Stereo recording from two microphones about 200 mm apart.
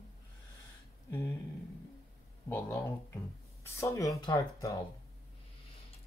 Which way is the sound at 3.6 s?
15° left (ahead or behind).